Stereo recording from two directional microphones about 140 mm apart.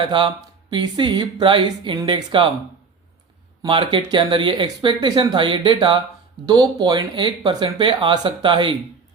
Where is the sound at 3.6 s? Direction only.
35° right (ahead or behind).